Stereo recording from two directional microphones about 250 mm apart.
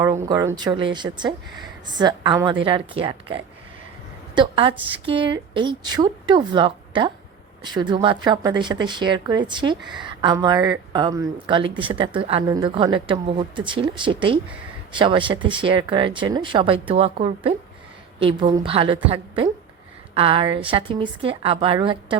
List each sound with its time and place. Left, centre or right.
0.0 s speech: centre
20.1 s speech: right